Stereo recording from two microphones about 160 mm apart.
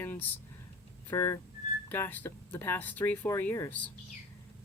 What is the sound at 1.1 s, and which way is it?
Speech, 20° left (ahead or behind).